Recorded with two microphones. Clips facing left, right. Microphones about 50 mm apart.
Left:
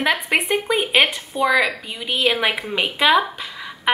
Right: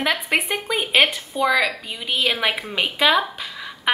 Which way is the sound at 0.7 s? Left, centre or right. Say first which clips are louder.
Right 1 dB; centre.